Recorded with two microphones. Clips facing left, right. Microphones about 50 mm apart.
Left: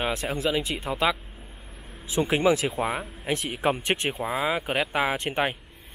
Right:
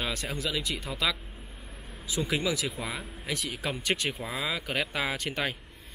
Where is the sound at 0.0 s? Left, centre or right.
Left.